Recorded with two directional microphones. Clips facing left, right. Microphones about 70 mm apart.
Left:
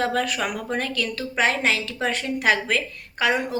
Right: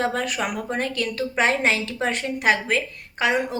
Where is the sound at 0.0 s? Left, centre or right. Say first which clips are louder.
Left 1 dB; right.